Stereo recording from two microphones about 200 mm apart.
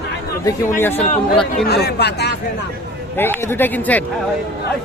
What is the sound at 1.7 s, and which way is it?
Speech, 55° left (ahead or behind).